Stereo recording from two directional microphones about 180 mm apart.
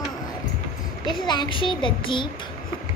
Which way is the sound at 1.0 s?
25° left (ahead or behind).